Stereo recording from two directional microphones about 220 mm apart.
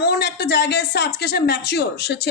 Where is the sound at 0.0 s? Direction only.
50° left (ahead or behind).